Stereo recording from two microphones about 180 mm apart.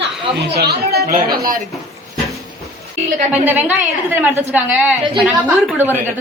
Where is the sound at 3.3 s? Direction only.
10° right (ahead or behind).